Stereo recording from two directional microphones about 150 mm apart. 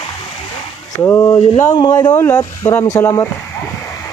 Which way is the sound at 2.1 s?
15° left (ahead or behind).